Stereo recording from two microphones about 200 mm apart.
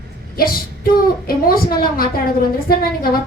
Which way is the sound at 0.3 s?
50° left (ahead or behind).